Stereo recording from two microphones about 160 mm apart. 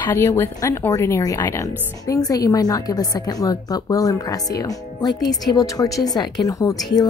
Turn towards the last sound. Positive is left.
turn(degrees=20)  # may be behind; listen again after turning